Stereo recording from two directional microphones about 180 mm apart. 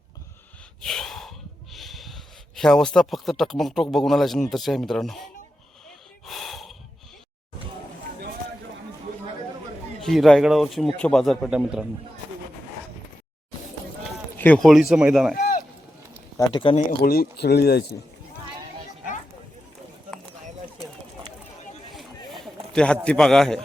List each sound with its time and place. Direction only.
0.8 s snort: centre (ahead or behind)
1.7 s a sound: centre (ahead or behind)
3.9 s a man's voice: centre (ahead or behind)
6.2 s snort: centre (ahead or behind)
10.0 s a man's voice: centre (ahead or behind)
14.3 s a man's voice: 10° left (ahead or behind)
16.5 s speech: 25° left (ahead or behind)
17.0 s speech: 55° left (ahead or behind)
22.7 s a man's voice: 5° left (ahead or behind)